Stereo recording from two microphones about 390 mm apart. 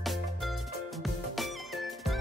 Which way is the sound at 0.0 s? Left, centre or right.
Centre.